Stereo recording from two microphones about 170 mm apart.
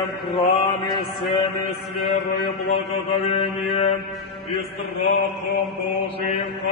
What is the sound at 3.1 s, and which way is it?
Mantra, 30° left (ahead or behind).